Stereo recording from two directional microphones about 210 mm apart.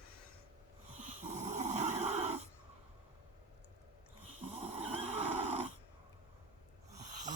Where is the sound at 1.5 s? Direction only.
35° right (ahead or behind).